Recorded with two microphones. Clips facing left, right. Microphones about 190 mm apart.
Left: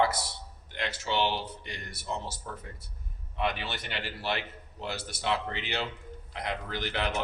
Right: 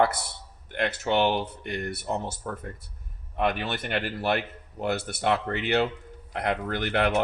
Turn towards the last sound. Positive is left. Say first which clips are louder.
# right 7 dB
turn(degrees=-60)  # may be behind; listen again after turning